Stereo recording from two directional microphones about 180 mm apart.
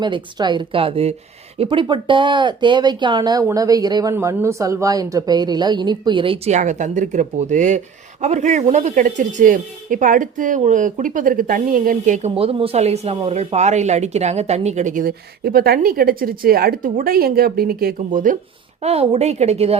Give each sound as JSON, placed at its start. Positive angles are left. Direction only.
{"t": 0.0, "sound": "speech", "side_deg": -25}
{"t": 18.8, "sound": "speech", "side_deg": -35}